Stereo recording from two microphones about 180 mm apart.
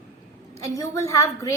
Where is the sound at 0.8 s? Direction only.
15° left (ahead or behind).